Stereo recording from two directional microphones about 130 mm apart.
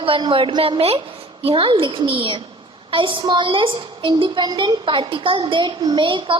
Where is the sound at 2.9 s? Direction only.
40° right (ahead or behind).